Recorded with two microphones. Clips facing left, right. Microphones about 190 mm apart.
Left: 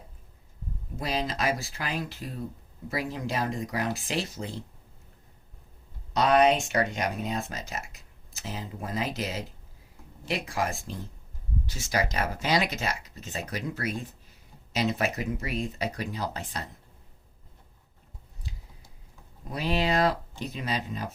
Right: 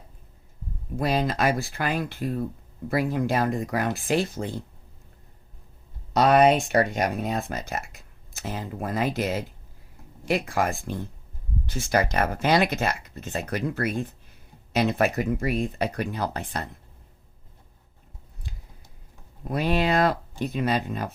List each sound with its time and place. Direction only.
0.9 s speech: 55° right (ahead or behind)
6.1 s speech: 50° right (ahead or behind)
19.5 s speech: 55° right (ahead or behind)